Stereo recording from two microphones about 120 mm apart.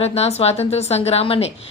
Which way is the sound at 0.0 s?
60° left (ahead or behind).